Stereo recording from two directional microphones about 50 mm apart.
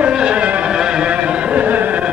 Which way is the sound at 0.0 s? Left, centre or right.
Right.